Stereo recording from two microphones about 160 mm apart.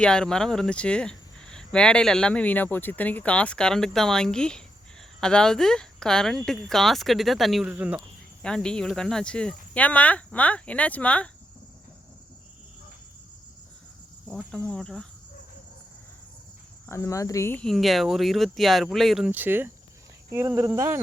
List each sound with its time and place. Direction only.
0.0 s speech: 5° left (ahead or behind)
8.4 s speech: 5° left (ahead or behind)
14.5 s speech: 5° left (ahead or behind)
16.8 s speech: 15° left (ahead or behind)
17.6 s speech: centre (ahead or behind); by 21.0 s 15° right (ahead or behind)